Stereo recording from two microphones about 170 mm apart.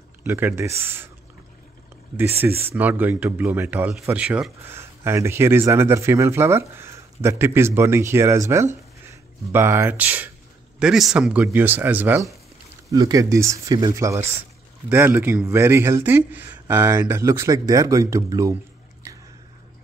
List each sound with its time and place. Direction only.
0.2 s a man's voice: 10° right (ahead or behind)
2.1 s a man's voice: 15° right (ahead or behind)